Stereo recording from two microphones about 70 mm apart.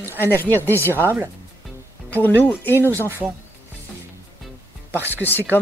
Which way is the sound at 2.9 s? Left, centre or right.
Right.